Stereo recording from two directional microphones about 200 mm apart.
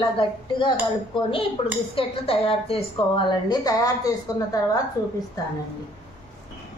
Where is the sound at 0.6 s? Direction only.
25° left (ahead or behind).